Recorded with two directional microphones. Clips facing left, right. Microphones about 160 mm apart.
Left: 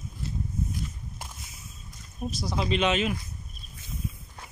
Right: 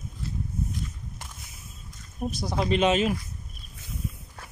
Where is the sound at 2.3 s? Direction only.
50° right (ahead or behind).